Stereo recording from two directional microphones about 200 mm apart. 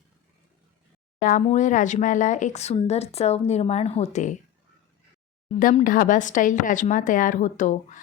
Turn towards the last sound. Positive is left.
turn(degrees=40)  # may be behind; listen again after turning